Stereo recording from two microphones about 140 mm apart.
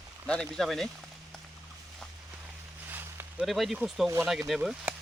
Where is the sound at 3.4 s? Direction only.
Centre (ahead or behind).